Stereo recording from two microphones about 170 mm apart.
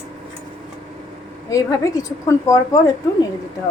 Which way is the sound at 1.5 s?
20° left (ahead or behind).